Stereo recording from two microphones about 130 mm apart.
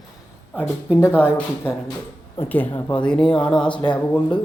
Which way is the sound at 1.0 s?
15° left (ahead or behind).